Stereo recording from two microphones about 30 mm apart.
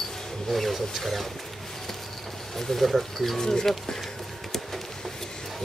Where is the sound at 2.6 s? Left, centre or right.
Centre.